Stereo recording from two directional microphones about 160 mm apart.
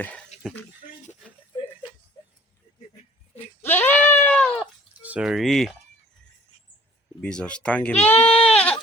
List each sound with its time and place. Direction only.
0.3 s a sound: 45° left (ahead or behind)
3.3 s goat: 15° left (ahead or behind)
5.0 s speech: 5° right (ahead or behind)
7.2 s speech: 5° left (ahead or behind)
8.3 s goat: 40° left (ahead or behind)